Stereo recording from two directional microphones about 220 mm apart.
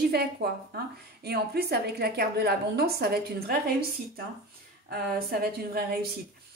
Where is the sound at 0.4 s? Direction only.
45° right (ahead or behind).